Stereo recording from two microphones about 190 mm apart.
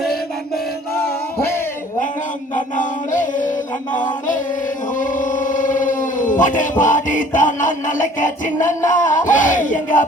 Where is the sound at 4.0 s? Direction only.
40° left (ahead or behind).